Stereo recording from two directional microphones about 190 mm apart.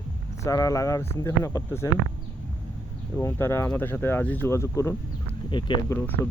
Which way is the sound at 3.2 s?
10° left (ahead or behind).